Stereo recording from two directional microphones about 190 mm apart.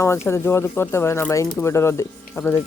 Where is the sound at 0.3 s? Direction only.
15° left (ahead or behind).